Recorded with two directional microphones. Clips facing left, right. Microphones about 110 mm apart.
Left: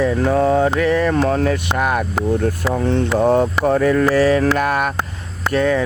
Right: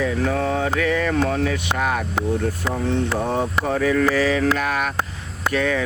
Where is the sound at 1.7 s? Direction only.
55° left (ahead or behind).